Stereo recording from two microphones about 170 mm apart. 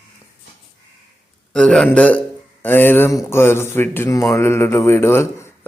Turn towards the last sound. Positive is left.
turn(degrees=15)  # may be behind; listen again after turning